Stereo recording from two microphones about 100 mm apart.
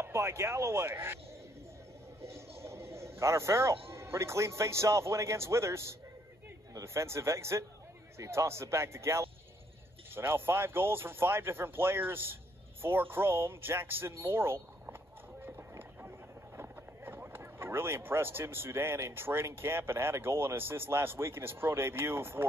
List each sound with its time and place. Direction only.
0.0 s speech: 25° right (ahead or behind)
2.6 s a sound: 25° right (ahead or behind)
3.9 s speech: 30° right (ahead or behind)